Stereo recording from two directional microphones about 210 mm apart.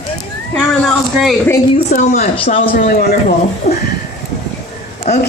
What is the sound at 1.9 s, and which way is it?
A woman's voice, 40° left (ahead or behind).